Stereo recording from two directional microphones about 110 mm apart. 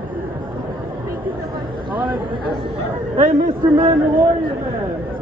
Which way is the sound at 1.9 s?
45° right (ahead or behind).